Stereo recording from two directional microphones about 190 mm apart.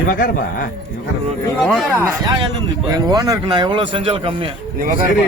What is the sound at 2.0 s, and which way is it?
Speech, 15° right (ahead or behind).